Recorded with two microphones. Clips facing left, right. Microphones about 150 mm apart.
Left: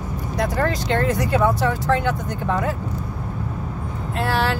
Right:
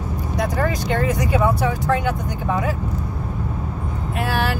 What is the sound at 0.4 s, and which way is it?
Speech, 10° right (ahead or behind).